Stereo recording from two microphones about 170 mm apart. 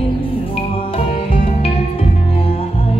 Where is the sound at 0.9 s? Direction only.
35° left (ahead or behind).